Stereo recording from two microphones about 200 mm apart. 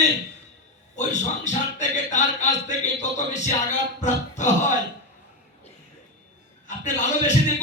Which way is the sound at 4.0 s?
35° left (ahead or behind).